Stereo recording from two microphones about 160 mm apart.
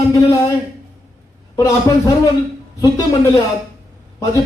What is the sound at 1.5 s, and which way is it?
Speech, 20° left (ahead or behind).